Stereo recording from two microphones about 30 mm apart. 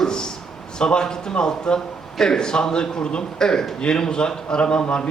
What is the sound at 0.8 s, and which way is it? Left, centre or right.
A man's voice, left.